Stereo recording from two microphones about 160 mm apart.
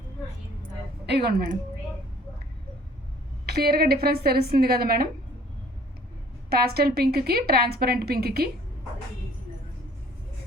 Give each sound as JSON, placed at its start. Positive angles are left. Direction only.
{"t": 1.0, "sound": "speech", "side_deg": -90}
{"t": 3.4, "sound": "a woman's voice", "side_deg": -80}
{"t": 6.5, "sound": "a woman's voice", "side_deg": -75}